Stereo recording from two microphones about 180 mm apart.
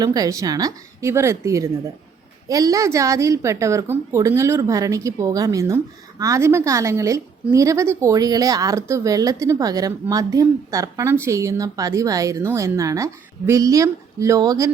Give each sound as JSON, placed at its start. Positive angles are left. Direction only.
{"t": 0.0, "sound": "speech", "side_deg": -20}